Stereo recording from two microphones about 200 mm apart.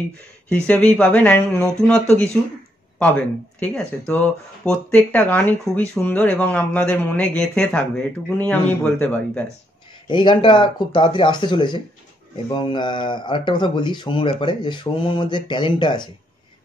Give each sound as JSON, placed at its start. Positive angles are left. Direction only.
{"t": 0.7, "sound": "speech", "side_deg": 10}
{"t": 3.0, "sound": "speech", "side_deg": 5}
{"t": 10.0, "sound": "speech", "side_deg": 25}